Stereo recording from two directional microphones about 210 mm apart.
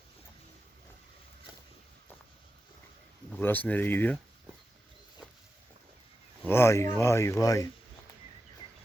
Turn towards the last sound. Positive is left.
turn(degrees=15)  # may be behind; listen again after turning